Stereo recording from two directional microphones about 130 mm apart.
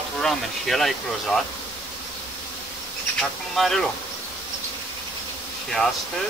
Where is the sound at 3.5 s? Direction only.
Centre (ahead or behind).